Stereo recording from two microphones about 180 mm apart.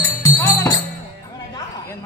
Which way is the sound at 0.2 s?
15° left (ahead or behind).